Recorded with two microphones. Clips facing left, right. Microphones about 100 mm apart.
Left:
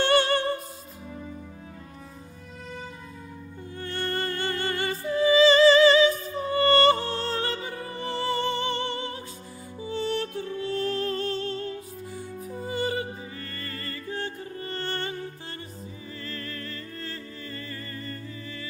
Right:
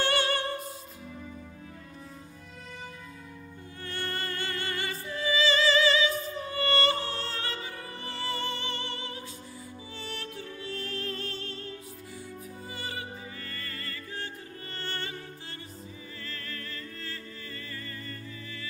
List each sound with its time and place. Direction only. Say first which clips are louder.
0.0 s music: left 6 dB; 30° left (ahead or behind)
3.8 s music: left 6 dB; 35° left (ahead or behind)
16.3 s music: left 5 dB; 35° left (ahead or behind)